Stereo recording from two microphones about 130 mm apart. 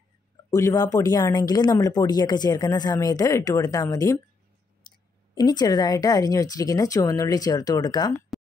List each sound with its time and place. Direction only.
0.5 s speech: 25° left (ahead or behind)
4.9 s clicking: 35° left (ahead or behind)
5.3 s speech: 30° left (ahead or behind)
8.3 s a sound: centre (ahead or behind)